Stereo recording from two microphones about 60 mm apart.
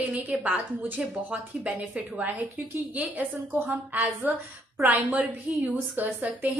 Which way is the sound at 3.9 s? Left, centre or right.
Right.